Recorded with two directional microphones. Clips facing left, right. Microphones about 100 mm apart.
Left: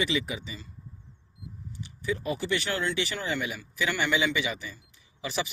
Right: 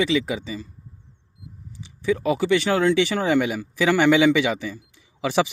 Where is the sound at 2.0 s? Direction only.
90° right.